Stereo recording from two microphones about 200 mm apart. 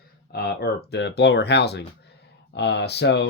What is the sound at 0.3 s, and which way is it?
Speech, 55° left (ahead or behind).